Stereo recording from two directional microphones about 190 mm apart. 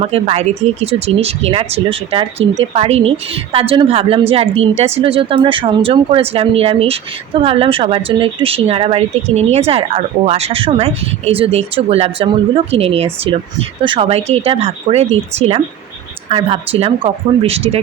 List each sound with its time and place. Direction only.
0.0 s a woman's voice: 35° right (ahead or behind)